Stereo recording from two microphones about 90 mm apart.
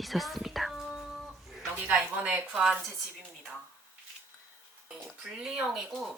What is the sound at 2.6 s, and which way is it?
Speech, centre (ahead or behind).